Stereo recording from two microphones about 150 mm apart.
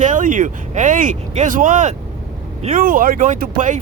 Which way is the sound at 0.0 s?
60° right (ahead or behind).